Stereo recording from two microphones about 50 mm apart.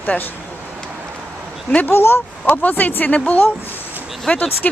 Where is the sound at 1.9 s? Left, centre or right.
Left.